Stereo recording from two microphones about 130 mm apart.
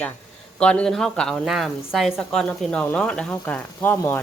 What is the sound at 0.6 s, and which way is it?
A woman's voice, 5° left (ahead or behind).